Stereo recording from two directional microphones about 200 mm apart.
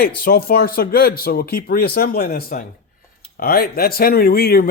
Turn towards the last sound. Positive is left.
turn(degrees=50)  # may be behind; listen again after turning